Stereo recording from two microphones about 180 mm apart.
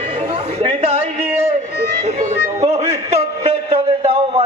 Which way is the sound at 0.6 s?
30° right (ahead or behind).